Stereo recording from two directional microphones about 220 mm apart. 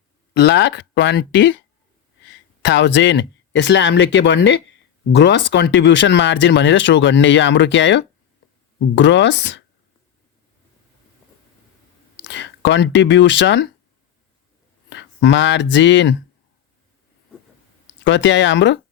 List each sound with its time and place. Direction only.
0.3 s speech: 50° left (ahead or behind)
12.1 s speech: 55° left (ahead or behind)
14.8 s speech: 55° left (ahead or behind)
18.0 s speech: 55° left (ahead or behind)